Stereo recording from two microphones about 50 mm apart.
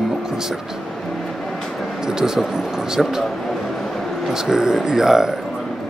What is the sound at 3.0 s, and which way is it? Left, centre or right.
Speech, centre.